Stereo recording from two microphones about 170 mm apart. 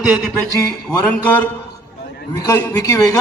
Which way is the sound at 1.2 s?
10° left (ahead or behind).